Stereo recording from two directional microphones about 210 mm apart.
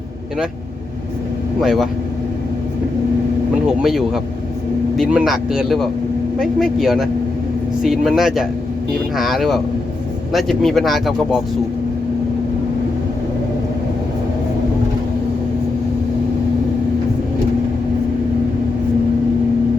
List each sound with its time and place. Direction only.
1.6 s speech: centre (ahead or behind)
3.8 s speech: centre (ahead or behind)